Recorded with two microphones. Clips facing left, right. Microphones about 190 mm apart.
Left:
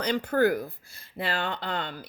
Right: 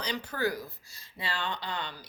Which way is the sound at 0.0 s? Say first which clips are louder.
Left 8 dB; 55° left (ahead or behind).